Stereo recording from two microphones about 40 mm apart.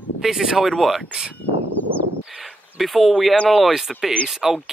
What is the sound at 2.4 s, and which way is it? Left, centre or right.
Speech, centre.